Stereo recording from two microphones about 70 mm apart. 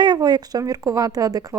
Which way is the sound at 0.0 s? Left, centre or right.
Right.